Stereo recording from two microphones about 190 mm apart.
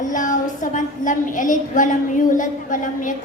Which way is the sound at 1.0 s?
45° left (ahead or behind).